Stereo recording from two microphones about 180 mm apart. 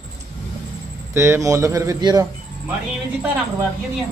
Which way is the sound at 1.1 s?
15° right (ahead or behind).